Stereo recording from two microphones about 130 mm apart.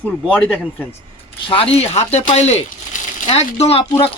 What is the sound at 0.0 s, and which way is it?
Speech, 10° left (ahead or behind).